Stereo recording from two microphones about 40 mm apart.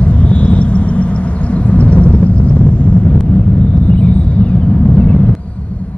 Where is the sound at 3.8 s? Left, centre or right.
Left.